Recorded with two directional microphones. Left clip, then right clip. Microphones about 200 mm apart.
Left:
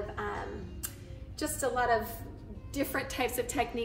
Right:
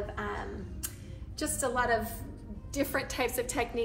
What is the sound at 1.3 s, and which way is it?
Speech, 30° right (ahead or behind).